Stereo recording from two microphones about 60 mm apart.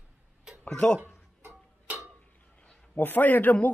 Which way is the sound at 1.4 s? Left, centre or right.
Right.